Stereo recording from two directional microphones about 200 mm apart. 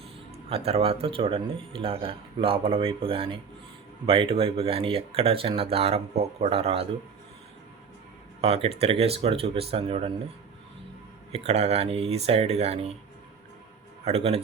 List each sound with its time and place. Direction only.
0.4 s speech: 30° right (ahead or behind)
8.4 s speech: 30° right (ahead or behind)
11.3 s speech: 30° right (ahead or behind)
14.0 s speech: 30° right (ahead or behind)